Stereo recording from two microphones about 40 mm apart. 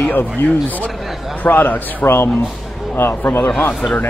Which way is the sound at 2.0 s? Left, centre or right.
Left.